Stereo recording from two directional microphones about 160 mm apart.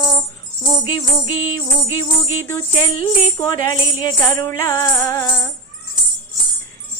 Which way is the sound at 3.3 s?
25° left (ahead or behind).